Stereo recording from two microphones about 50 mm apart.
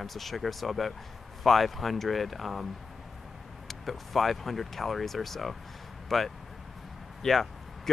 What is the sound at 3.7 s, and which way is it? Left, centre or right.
Speech, centre.